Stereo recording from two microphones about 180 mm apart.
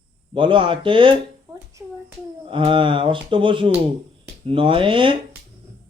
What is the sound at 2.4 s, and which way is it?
A man's voice, 30° right (ahead or behind).